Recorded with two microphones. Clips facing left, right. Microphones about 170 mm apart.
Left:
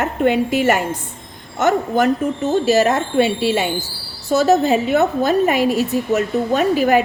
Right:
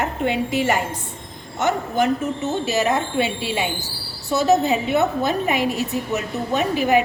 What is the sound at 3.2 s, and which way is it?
Speech, 5° left (ahead or behind).